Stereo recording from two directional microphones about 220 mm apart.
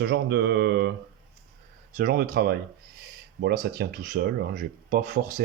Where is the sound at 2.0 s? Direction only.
45° right (ahead or behind).